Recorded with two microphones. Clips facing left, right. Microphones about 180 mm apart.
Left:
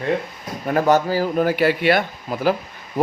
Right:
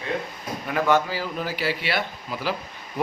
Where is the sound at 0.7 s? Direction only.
40° left (ahead or behind).